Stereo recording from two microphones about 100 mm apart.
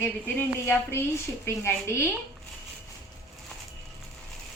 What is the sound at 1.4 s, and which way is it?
Speech, 30° left (ahead or behind).